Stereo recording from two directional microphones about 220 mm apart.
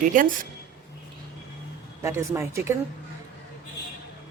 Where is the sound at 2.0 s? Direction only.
15° right (ahead or behind).